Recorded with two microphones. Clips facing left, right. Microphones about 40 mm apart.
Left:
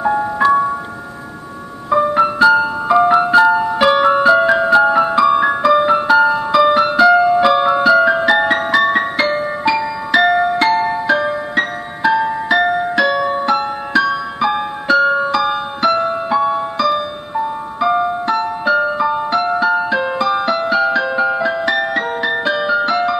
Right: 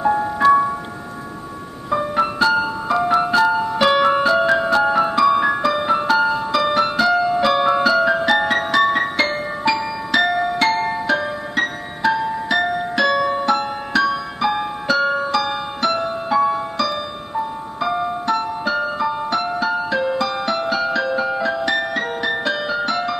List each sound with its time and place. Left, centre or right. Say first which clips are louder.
2.3 s music: left 6 dB; centre
12.9 s music: left 2 dB; centre